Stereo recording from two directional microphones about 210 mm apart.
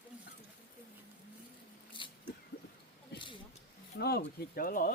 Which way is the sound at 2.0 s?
25° left (ahead or behind).